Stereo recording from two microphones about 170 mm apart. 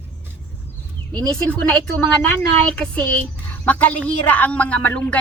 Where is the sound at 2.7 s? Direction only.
5° left (ahead or behind).